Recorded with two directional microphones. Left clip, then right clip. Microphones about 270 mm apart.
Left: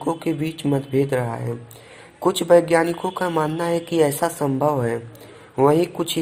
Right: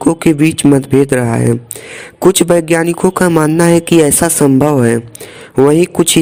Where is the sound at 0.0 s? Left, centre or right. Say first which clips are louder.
Right 13 dB; right.